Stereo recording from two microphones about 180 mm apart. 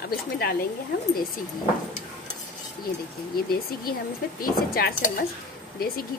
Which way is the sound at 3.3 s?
55° left (ahead or behind).